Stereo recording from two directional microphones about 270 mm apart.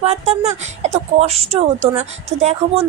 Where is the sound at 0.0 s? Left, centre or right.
Right.